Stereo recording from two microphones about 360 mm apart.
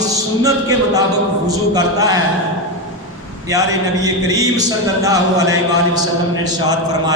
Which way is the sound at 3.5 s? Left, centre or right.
Centre.